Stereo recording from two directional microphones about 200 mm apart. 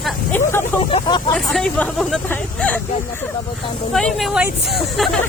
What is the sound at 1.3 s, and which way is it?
Speech, 5° left (ahead or behind).